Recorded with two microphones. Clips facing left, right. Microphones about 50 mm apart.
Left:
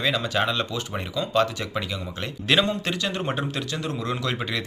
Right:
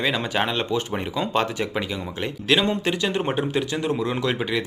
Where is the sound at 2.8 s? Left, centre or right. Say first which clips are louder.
Right 4 dB; centre.